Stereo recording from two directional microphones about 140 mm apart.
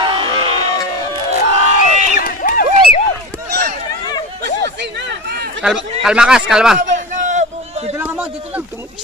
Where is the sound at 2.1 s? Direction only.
80° left.